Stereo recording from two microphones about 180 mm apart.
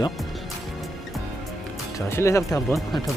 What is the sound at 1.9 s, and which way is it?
Speech, 15° left (ahead or behind).